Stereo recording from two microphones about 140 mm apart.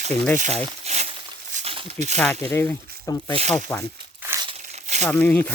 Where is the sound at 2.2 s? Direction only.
10° left (ahead or behind).